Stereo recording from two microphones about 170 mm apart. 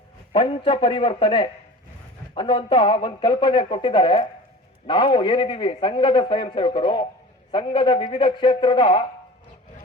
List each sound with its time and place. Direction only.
0.3 s a man's voice: 30° left (ahead or behind)